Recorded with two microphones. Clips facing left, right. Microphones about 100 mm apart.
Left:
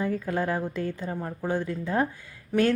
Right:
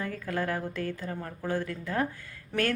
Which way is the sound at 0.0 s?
20° left (ahead or behind).